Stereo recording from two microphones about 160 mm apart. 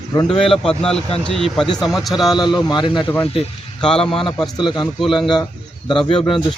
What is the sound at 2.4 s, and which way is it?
A man's voice, 25° left (ahead or behind).